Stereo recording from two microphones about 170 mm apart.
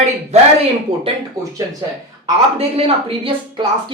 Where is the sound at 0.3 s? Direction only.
40° right (ahead or behind).